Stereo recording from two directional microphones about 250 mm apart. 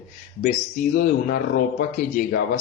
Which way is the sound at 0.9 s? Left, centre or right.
Left.